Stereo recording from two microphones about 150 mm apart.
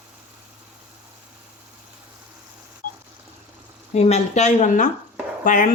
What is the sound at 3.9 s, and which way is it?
Speech, 45° left (ahead or behind).